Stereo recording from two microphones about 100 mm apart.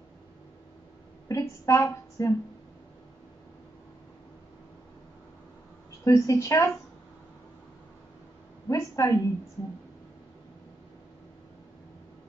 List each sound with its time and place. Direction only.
1.3 s a woman's voice: 30° left (ahead or behind)
6.0 s speech: 30° left (ahead or behind)
8.6 s a woman's voice: 30° left (ahead or behind)